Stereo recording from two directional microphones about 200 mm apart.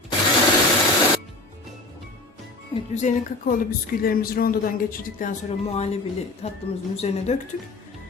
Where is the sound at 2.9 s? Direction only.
35° left (ahead or behind).